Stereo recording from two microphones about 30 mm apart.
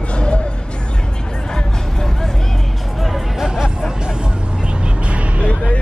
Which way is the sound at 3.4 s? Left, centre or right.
Centre.